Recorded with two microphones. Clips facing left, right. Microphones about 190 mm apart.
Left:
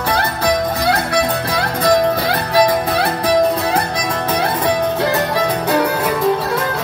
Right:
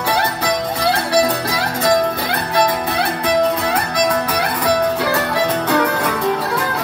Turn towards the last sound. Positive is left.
turn(degrees=10)  # may be behind; listen again after turning